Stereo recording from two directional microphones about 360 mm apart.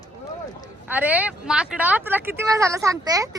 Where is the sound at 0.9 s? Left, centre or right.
Centre.